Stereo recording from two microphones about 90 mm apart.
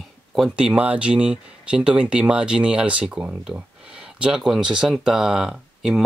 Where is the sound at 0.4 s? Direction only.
10° right (ahead or behind).